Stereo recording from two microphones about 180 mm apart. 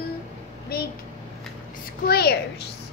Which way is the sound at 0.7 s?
60° left (ahead or behind).